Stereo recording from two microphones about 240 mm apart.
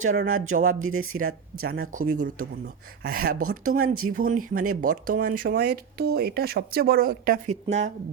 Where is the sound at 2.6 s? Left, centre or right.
Right.